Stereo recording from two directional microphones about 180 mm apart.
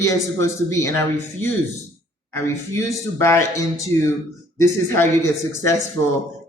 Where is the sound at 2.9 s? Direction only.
15° left (ahead or behind).